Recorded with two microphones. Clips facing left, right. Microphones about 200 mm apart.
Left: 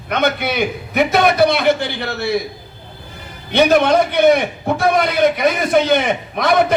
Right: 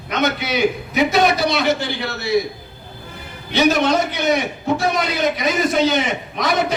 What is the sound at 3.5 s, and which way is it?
A man's voice, 55° left (ahead or behind).